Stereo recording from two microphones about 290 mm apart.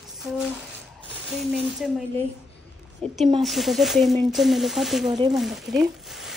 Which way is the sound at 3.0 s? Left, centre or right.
Right.